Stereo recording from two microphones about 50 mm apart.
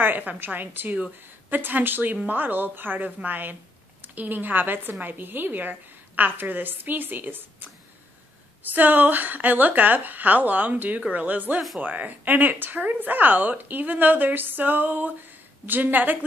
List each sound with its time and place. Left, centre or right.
0.0 s a woman's voice: right
8.6 s speech: right
11.0 s speech: right
11.2 s speech: right